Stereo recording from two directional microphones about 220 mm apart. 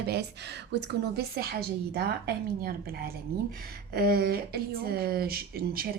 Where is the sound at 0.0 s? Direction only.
50° right (ahead or behind).